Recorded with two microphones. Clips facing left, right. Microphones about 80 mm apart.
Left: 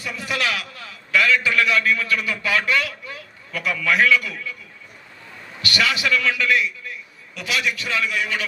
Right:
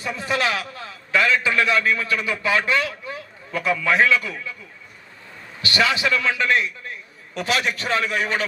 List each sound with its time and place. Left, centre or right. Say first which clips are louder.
0.0 s a man's voice: right 2 dB; right
5.6 s a man's voice: right 1 dB; right